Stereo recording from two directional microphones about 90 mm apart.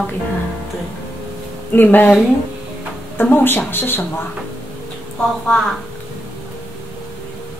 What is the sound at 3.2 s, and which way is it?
Speech, 20° left (ahead or behind).